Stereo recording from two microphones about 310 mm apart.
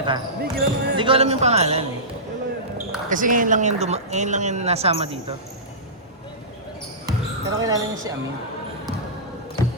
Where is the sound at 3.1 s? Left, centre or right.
Right.